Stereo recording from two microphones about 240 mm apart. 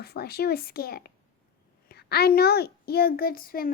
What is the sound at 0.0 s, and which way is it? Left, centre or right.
A child's voice, left.